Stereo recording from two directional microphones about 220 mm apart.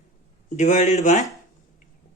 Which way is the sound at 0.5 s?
35° left (ahead or behind).